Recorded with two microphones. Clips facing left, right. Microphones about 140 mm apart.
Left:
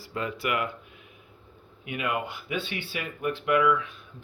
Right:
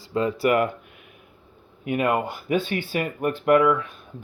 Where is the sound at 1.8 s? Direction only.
45° right (ahead or behind).